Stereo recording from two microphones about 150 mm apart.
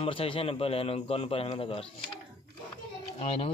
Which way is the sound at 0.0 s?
40° left (ahead or behind).